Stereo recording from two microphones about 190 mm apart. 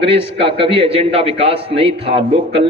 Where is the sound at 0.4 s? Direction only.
30° right (ahead or behind).